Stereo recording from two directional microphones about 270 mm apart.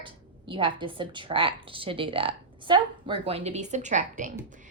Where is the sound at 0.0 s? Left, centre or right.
Centre.